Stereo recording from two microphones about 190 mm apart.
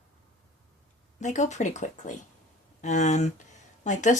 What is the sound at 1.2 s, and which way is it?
Speech, 40° left (ahead or behind).